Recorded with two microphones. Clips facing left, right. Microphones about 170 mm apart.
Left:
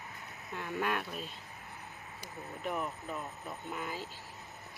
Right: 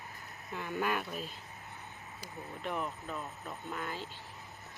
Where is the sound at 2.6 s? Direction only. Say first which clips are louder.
Left 1 dB; 5° left (ahead or behind).